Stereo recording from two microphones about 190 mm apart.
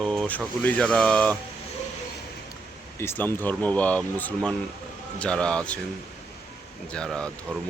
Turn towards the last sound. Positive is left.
turn(degrees=5)  # may be behind; listen again after turning